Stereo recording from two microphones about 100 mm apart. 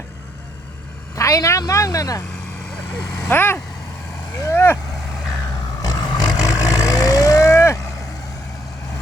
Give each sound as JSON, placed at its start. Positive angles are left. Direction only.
{"t": 1.1, "sound": "speech", "side_deg": 35}
{"t": 3.2, "sound": "speech", "side_deg": 20}
{"t": 4.5, "sound": "vehicle", "side_deg": 20}
{"t": 5.8, "sound": "vehicle", "side_deg": 40}